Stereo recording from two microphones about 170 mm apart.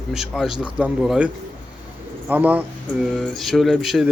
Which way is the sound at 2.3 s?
10° right (ahead or behind).